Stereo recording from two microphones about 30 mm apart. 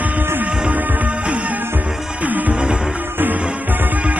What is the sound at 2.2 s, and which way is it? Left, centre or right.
Music, right.